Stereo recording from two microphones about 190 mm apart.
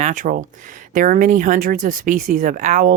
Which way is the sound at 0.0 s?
40° right (ahead or behind).